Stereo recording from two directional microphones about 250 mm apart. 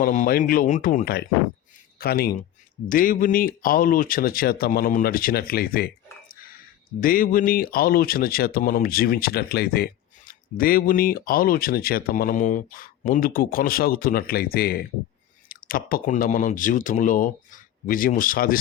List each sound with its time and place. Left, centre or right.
0.0 s speech: left